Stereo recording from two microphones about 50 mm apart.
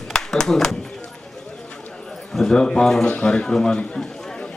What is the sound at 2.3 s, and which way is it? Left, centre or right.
Speech, centre.